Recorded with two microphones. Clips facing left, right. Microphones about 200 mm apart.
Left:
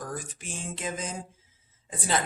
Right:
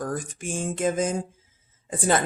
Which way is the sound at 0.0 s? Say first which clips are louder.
Right 7 dB; 50° right (ahead or behind).